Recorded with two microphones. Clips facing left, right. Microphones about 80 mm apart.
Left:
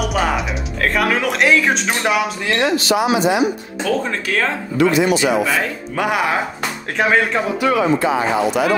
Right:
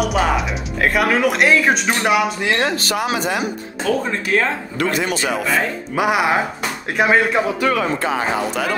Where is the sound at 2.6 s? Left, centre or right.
Right.